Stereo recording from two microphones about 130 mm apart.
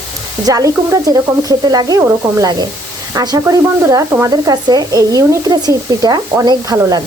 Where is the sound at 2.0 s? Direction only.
20° right (ahead or behind).